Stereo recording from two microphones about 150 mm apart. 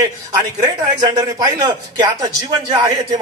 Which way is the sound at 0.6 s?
25° right (ahead or behind).